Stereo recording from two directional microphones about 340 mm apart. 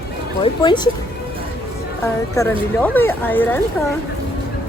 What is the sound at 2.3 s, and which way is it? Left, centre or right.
Speech, centre.